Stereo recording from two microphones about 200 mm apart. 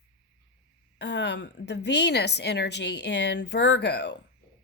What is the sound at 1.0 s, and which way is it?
A woman's voice, 60° left (ahead or behind).